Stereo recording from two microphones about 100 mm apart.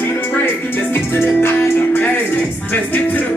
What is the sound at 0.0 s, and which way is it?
Music, 15° left (ahead or behind).